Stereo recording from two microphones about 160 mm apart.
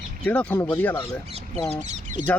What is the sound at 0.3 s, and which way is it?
Speech, 10° left (ahead or behind).